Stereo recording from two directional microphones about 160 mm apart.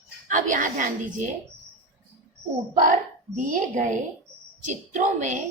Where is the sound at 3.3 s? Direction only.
50° right (ahead or behind).